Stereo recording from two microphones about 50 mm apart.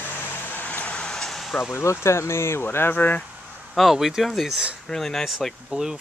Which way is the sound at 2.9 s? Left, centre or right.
Left.